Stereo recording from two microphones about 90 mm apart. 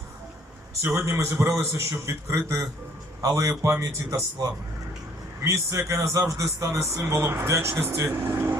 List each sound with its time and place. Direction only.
0.8 s a man's voice: 30° right (ahead or behind)
5.4 s a man's voice: 30° right (ahead or behind)